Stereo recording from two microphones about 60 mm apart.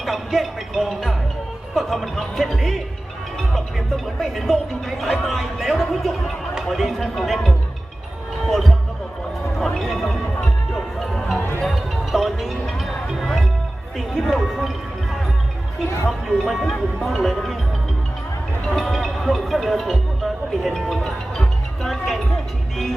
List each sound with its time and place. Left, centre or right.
0.0 s music: centre
1.7 s speech: centre
9.6 s speech: centre
11.3 s music: left
11.6 s music: centre
14.2 s speech: centre
16.0 s speech: centre
18.7 s speech: centre